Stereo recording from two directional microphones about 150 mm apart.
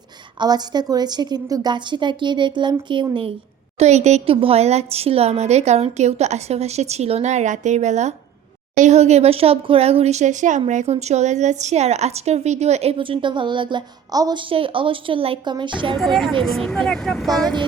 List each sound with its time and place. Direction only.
0.3 s a woman's voice: 30° right (ahead or behind)
3.8 s speech: 50° right (ahead or behind); by 14.4 s 25° right (ahead or behind)
14.5 s a woman's voice: 35° right (ahead or behind)
16.0 s speech: centre (ahead or behind)
17.2 s a woman's voice: 25° right (ahead or behind)